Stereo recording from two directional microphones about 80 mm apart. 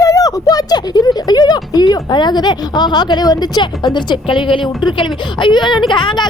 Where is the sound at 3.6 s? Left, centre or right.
Left.